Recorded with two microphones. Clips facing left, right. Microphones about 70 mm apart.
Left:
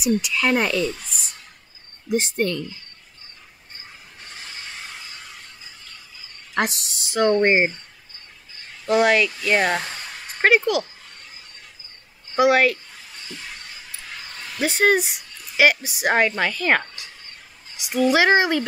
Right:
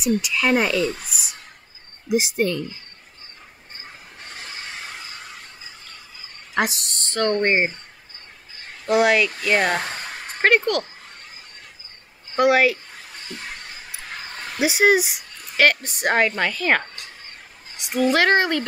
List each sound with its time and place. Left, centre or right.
0.0 s a woman's voice: centre
2.0 s speech: centre
6.5 s speech: centre
8.8 s a woman's voice: centre
9.8 s a sound: right
10.4 s a woman's voice: centre
12.4 s a woman's voice: centre
13.3 s a sound: right
14.6 s speech: centre
15.5 s a woman's voice: centre
18.1 s speech: centre